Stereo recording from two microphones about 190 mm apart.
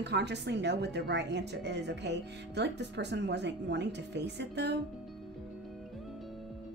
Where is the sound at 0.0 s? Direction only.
65° right (ahead or behind).